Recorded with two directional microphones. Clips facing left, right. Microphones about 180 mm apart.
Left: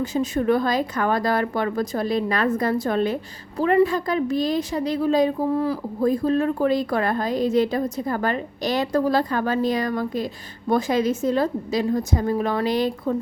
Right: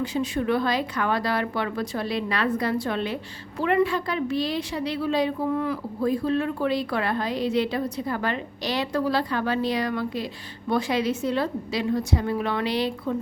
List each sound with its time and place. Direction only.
0.0 s a woman's voice: 45° left (ahead or behind)